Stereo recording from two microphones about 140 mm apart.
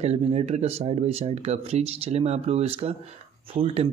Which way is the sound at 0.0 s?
45° right (ahead or behind).